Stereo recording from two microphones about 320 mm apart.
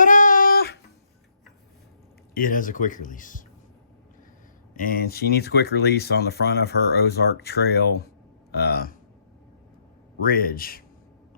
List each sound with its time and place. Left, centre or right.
0.0 s a sound: left
2.3 s speech: left
4.7 s speech: left
10.2 s speech: left